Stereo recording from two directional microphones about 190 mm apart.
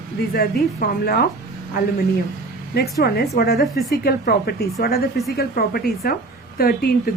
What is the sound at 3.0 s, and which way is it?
Speech, 60° left (ahead or behind).